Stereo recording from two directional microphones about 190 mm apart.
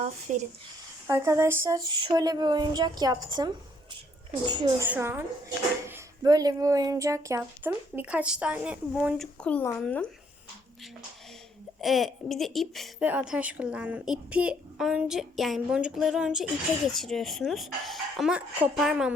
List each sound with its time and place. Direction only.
0.0 s speech: 40° right (ahead or behind)
1.0 s speech: 15° right (ahead or behind)
1.9 s a woman's voice: 25° right (ahead or behind)
4.9 s speech: 10° right (ahead or behind); by 10.1 s 5° left (ahead or behind)
11.8 s a woman's voice: centre (ahead or behind)